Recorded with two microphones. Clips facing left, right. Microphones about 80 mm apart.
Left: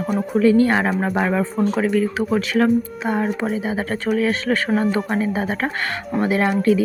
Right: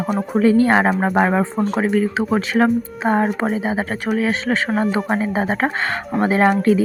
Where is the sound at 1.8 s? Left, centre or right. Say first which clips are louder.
Right 1 dB; right.